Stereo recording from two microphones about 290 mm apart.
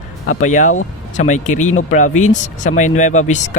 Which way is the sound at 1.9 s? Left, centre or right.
Left.